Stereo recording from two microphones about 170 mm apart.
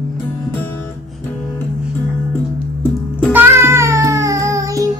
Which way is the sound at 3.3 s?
15° right (ahead or behind).